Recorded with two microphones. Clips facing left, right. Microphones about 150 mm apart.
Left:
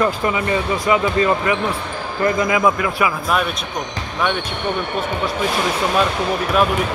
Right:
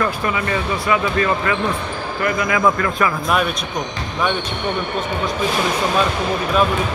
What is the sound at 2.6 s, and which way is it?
Speech, 10° left (ahead or behind).